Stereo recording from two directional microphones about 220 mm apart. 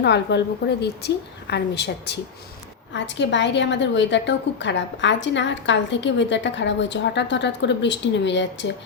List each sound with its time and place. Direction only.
0.0 s a woman's voice: 50° left (ahead or behind)